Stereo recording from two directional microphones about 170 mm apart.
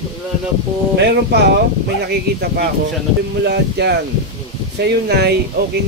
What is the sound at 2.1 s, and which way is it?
Speech, 70° right (ahead or behind).